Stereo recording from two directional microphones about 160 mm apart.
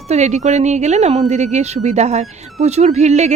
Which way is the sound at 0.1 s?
45° right (ahead or behind).